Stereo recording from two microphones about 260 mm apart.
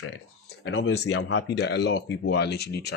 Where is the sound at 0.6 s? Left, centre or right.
Left.